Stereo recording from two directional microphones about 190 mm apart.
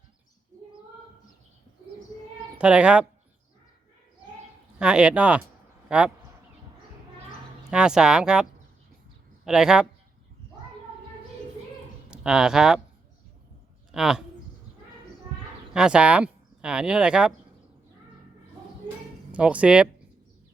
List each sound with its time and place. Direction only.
2.6 s speech: 5° right (ahead or behind)
4.8 s speech: 5° right (ahead or behind)
7.7 s speech: 5° right (ahead or behind)
12.1 s speech: 5° right (ahead or behind)
13.9 s speech: 5° right (ahead or behind)
15.7 s speech: 5° right (ahead or behind)
19.3 s speech: 5° right (ahead or behind)